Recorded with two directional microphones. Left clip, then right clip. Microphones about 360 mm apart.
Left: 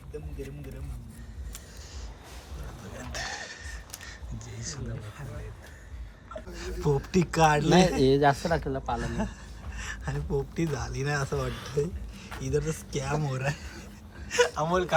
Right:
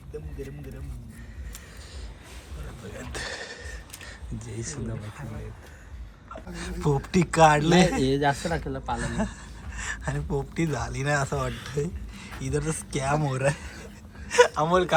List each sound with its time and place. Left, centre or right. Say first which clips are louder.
0.1 s speech: right 2 dB; centre
2.9 s a sound: right 1 dB; centre
6.5 s speech: right 1 dB; centre
8.0 s speech: left 2 dB; centre